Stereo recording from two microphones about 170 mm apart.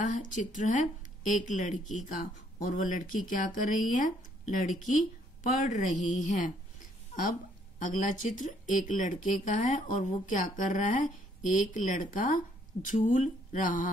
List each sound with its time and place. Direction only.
0.0 s speech: 50° left (ahead or behind)
7.8 s speech: 50° left (ahead or behind)